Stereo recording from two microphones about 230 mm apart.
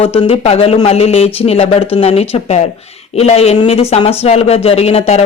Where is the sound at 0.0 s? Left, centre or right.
Left.